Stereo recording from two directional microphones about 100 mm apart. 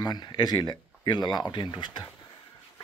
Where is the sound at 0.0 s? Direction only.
45° left (ahead or behind).